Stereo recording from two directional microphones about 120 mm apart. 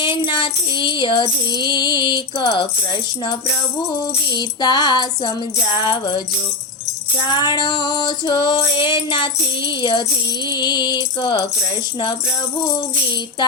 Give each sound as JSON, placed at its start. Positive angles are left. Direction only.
{"t": 0.0, "sound": "female singing", "side_deg": 40}
{"t": 4.3, "sound": "female singing", "side_deg": 35}
{"t": 5.7, "sound": "music", "side_deg": 45}
{"t": 7.3, "sound": "female singing", "side_deg": 40}